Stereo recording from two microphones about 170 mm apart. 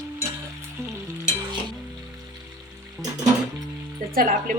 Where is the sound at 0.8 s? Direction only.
15° right (ahead or behind).